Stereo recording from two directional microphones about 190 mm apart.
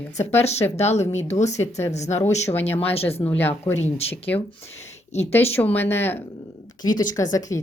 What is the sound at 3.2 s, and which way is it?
Speech, 10° left (ahead or behind).